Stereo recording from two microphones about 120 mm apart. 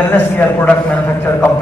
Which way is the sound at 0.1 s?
15° left (ahead or behind).